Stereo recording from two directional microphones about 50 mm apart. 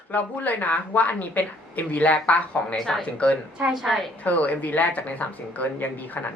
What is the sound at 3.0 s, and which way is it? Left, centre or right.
Speech, left.